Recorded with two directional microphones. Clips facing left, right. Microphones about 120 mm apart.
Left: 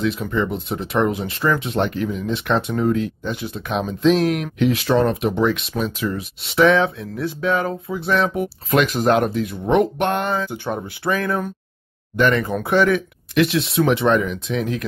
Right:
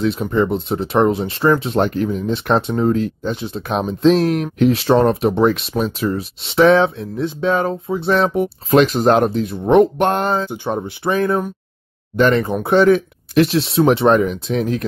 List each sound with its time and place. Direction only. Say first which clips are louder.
0.0 s speech: right 4 dB; 35° right (ahead or behind)
10.5 s speech: right 4 dB; 20° right (ahead or behind); by 14.9 s 35° right (ahead or behind)